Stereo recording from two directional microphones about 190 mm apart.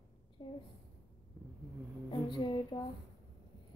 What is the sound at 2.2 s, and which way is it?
Speech, 25° left (ahead or behind).